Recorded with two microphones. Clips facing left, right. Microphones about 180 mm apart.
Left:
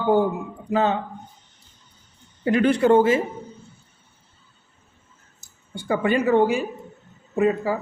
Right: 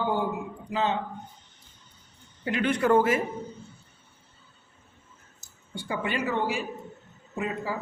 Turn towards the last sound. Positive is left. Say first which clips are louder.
# left 10 dB
turn(degrees=50)  # may be behind; listen again after turning